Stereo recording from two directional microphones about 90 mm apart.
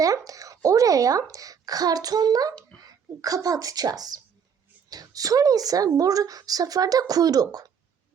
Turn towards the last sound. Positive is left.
turn(degrees=-45)  # may be behind; listen again after turning